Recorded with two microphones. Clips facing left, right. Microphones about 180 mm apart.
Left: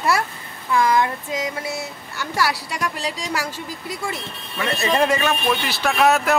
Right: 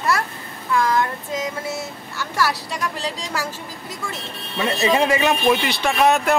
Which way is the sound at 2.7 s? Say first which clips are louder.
Even; 10° left (ahead or behind).